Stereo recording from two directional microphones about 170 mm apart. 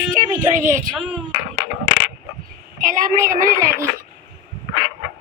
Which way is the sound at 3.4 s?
55° right (ahead or behind).